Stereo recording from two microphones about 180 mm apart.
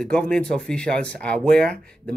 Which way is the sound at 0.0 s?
5° left (ahead or behind).